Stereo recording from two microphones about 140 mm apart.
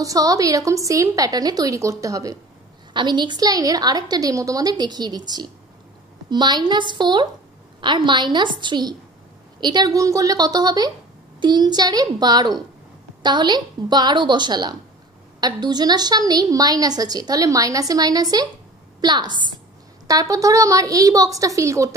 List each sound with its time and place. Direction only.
0.0 s a woman's voice: 25° right (ahead or behind)